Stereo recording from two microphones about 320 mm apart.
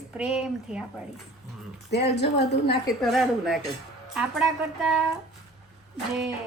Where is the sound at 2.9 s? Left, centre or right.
Centre.